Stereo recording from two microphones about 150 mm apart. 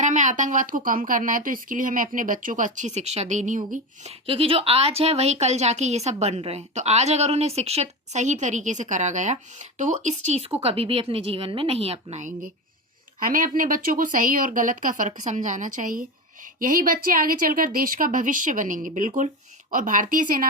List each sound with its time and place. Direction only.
0.0 s a woman's voice: 55° right (ahead or behind)
13.1 s a woman's voice: 65° right (ahead or behind)